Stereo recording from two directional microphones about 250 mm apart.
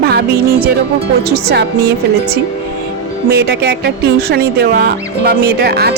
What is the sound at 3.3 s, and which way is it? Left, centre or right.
Speech, right.